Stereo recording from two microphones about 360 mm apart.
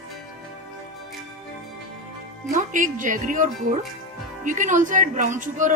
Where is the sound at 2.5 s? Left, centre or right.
Right.